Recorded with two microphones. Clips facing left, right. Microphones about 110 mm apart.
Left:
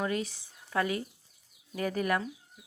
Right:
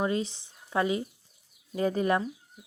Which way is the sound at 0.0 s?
25° right (ahead or behind).